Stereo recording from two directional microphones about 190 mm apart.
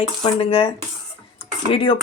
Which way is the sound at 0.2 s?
30° left (ahead or behind).